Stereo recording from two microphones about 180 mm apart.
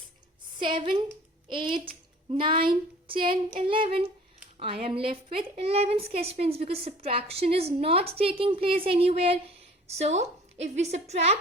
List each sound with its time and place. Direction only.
0.6 s a woman's voice: 25° right (ahead or behind)